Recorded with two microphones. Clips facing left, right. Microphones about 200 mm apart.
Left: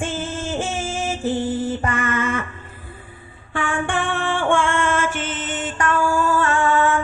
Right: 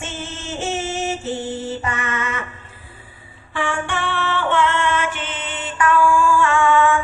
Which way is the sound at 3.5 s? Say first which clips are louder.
Left 1 dB; 50° left (ahead or behind).